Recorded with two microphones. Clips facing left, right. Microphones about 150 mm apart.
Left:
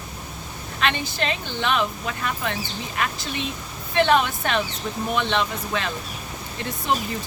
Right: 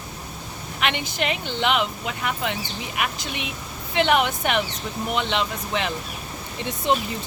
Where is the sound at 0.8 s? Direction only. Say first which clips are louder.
Left 1 dB; 15° right (ahead or behind).